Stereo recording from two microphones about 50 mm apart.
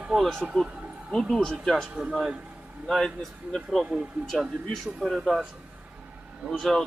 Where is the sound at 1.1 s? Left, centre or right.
Centre.